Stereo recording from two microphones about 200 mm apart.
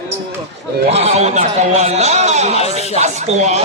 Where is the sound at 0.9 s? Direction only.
35° right (ahead or behind).